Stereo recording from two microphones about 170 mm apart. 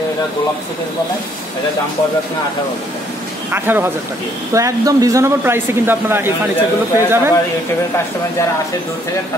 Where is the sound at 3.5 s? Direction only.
15° right (ahead or behind).